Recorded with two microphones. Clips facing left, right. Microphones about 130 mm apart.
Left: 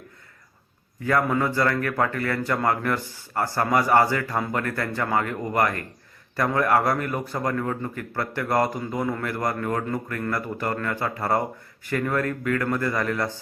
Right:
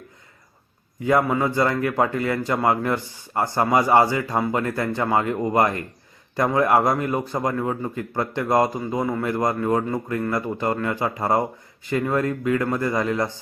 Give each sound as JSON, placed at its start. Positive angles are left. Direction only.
{"t": 1.0, "sound": "a man's voice", "side_deg": -15}